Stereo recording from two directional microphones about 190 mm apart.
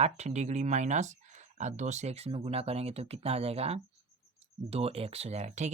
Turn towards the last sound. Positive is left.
turn(degrees=-35)  # may be behind; listen again after turning